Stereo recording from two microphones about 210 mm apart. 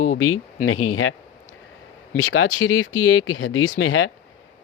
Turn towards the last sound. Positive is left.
turn(degrees=75)  # may be behind; listen again after turning